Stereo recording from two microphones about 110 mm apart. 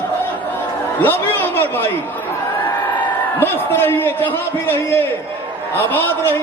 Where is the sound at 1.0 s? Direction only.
20° left (ahead or behind).